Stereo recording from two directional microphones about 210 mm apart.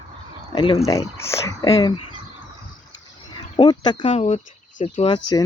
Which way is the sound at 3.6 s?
20° left (ahead or behind).